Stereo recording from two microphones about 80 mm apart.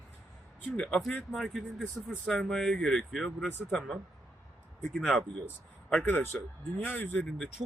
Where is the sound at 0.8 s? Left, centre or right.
Centre.